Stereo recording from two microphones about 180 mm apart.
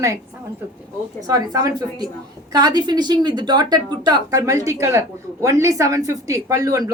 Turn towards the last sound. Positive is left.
turn(degrees=-20)  # may be behind; listen again after turning